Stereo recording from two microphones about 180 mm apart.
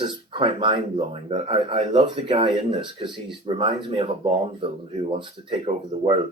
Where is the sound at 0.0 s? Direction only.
30° right (ahead or behind).